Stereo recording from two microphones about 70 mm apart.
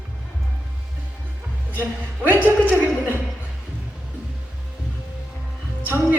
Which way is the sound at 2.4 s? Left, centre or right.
Right.